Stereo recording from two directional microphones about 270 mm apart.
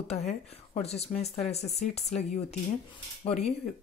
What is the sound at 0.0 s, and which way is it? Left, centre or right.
A woman's voice, left.